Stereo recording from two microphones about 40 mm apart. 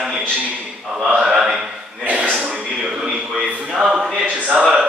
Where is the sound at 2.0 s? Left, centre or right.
Right.